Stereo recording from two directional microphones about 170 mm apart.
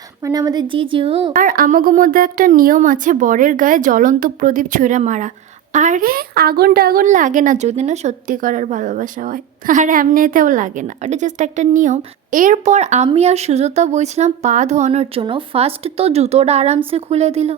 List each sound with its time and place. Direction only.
0.2 s a woman's voice: 20° right (ahead or behind)
1.4 s a woman's voice: 55° right (ahead or behind); by 17.6 s 40° right (ahead or behind)